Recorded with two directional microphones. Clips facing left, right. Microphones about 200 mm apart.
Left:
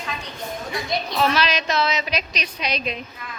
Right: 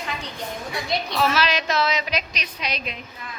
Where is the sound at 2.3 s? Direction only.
30° left (ahead or behind).